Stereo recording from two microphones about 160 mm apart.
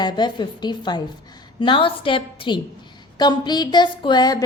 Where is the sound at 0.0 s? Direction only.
25° left (ahead or behind).